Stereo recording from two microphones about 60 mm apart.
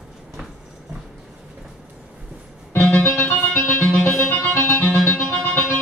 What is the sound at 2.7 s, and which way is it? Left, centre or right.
Music, left.